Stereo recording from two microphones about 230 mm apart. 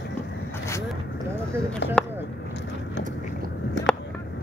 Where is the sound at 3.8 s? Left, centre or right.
Left.